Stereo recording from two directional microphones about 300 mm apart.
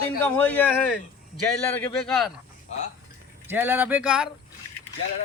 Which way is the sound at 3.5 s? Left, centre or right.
Centre.